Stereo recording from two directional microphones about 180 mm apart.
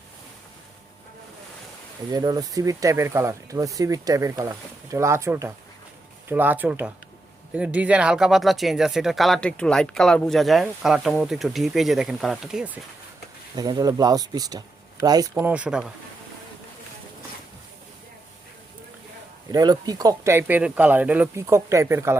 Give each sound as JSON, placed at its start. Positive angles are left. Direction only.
{"t": 2.0, "sound": "speech", "side_deg": -20}
{"t": 13.6, "sound": "speech", "side_deg": -20}
{"t": 19.5, "sound": "speech", "side_deg": -20}